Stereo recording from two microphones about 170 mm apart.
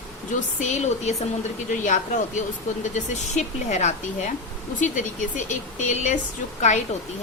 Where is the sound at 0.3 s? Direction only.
45° left (ahead or behind).